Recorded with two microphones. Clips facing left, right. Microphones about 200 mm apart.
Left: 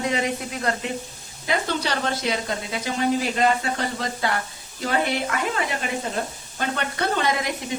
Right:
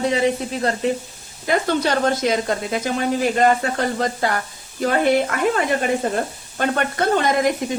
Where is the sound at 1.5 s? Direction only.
50° right (ahead or behind).